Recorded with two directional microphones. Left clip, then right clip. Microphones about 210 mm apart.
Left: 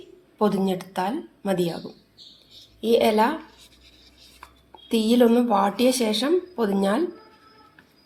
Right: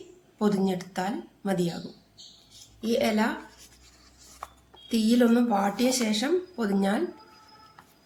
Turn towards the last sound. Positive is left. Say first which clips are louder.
# left 5 dB
turn(degrees=10)  # may be behind; listen again after turning